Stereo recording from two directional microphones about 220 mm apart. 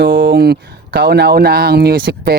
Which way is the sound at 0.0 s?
50° right (ahead or behind).